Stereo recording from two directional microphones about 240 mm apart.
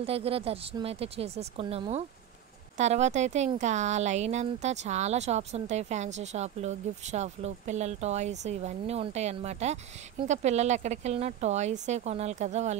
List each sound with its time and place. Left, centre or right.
0.0 s speech: right